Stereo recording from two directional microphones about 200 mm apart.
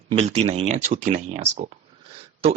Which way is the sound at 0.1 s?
30° right (ahead or behind).